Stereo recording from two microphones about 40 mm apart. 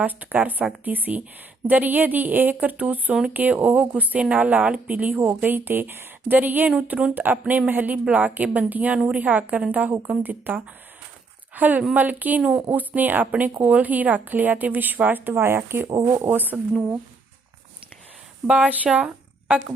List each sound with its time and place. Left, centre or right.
0.0 s speech: right
5.4 s speech: right
6.3 s speech: right
6.7 s speech: right
7.1 s speech: right
12.4 s speech: right
12.6 s speech: right
15.4 s speech: right
18.4 s speech: right
18.9 s a sound: right